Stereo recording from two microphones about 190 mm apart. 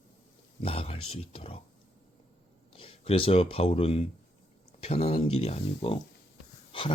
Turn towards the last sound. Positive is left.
turn(degrees=25)  # may be behind; listen again after turning